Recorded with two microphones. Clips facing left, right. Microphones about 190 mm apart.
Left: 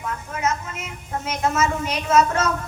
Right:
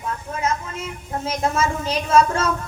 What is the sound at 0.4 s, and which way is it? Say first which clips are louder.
A woman's voice: right 1 dB; 30° right (ahead or behind).